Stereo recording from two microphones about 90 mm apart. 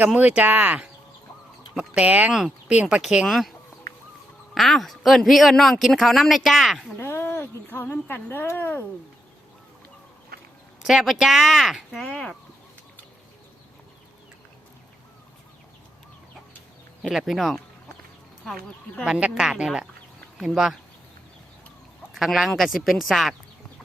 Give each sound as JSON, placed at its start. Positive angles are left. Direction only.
{"t": 0.0, "sound": "speech", "side_deg": -15}
{"t": 3.2, "sound": "a man's voice", "side_deg": 0}
{"t": 4.5, "sound": "a man's voice", "side_deg": 0}
{"t": 6.9, "sound": "speech", "side_deg": 30}
{"t": 10.8, "sound": "a man's voice", "side_deg": 0}
{"t": 11.9, "sound": "speech", "side_deg": 10}
{"t": 17.0, "sound": "a man's voice", "side_deg": 0}
{"t": 19.0, "sound": "speech", "side_deg": -10}
{"t": 22.1, "sound": "a man's voice", "side_deg": 0}